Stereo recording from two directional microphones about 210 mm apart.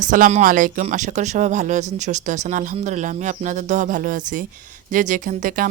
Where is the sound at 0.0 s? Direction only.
40° right (ahead or behind).